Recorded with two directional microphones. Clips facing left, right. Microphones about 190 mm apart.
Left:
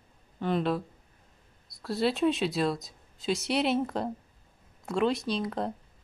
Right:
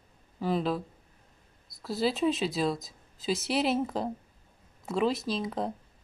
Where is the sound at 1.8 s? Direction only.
Centre (ahead or behind).